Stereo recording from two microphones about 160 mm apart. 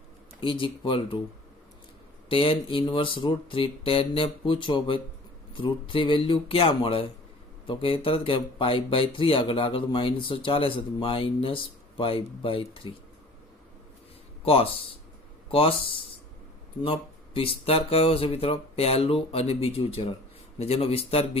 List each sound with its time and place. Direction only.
0.3 s speech: 30° left (ahead or behind)
2.3 s speech: 35° left (ahead or behind)
14.4 s speech: 35° left (ahead or behind)